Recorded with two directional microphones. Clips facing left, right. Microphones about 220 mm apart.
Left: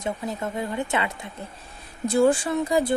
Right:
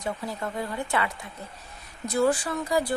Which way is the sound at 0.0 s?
20° left (ahead or behind).